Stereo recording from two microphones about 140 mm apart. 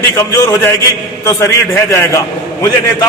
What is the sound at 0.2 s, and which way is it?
A man's voice, 20° left (ahead or behind).